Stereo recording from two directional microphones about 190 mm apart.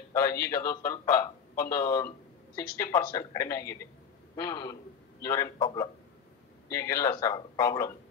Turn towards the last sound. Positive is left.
turn(degrees=20)  # may be behind; listen again after turning